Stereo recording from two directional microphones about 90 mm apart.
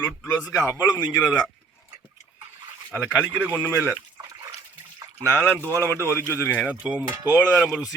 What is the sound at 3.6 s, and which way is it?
Speech, 25° right (ahead or behind).